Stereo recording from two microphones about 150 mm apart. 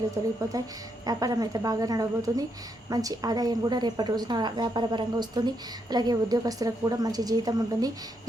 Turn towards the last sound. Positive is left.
turn(degrees=-25)  # may be behind; listen again after turning